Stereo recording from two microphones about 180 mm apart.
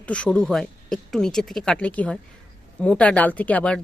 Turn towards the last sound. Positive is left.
turn(degrees=5)  # may be behind; listen again after turning